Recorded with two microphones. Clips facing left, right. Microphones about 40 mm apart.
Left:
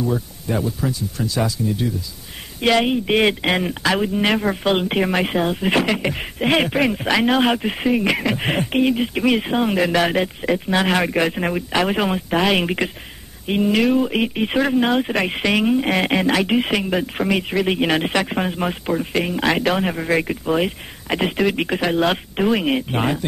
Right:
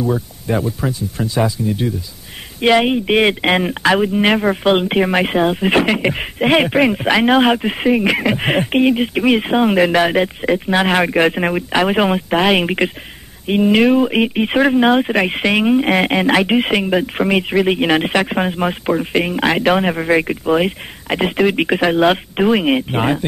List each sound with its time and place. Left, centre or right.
0.0 s speech: centre
0.7 s speech: right
2.6 s speech: centre
3.5 s speech: right
16.3 s speech: right